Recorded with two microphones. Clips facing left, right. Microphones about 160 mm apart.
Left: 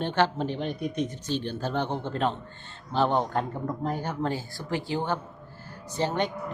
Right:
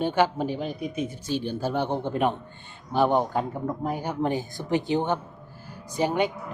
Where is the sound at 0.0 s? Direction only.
10° right (ahead or behind).